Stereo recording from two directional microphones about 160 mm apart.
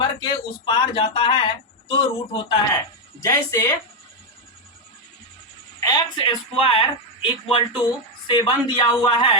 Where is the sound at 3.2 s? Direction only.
20° left (ahead or behind).